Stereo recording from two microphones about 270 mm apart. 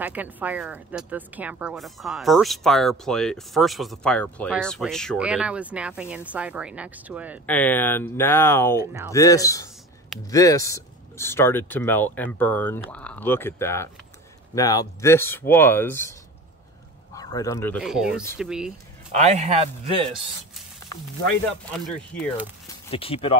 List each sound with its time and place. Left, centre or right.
0.0 s speech: centre
7.4 s speech: centre
19.1 s speech: right
21.7 s speech: centre
22.8 s speech: left